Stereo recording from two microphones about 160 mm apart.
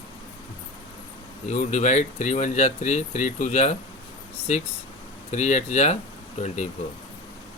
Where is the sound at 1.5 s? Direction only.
45° left (ahead or behind).